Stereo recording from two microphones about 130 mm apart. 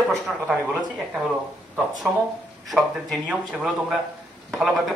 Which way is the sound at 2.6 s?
Centre (ahead or behind).